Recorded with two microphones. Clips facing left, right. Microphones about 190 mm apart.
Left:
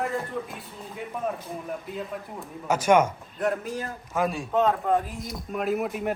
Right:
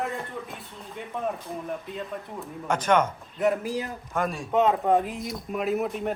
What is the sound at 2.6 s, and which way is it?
A man's voice, 10° left (ahead or behind).